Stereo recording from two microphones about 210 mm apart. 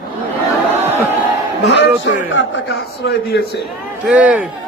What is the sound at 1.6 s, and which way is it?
Speech, 55° left (ahead or behind).